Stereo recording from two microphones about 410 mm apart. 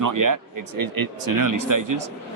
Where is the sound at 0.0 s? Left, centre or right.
Right.